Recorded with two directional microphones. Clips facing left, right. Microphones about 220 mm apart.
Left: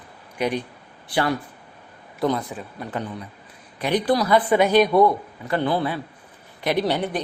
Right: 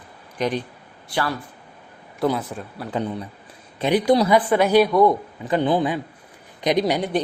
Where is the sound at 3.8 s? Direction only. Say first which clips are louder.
Right 3 dB; 25° right (ahead or behind).